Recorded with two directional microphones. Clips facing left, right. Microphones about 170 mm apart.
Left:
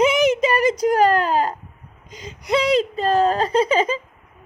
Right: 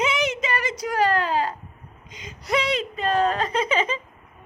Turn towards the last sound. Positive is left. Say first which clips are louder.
# left 6 dB
turn(degrees=35)  # may be behind; listen again after turning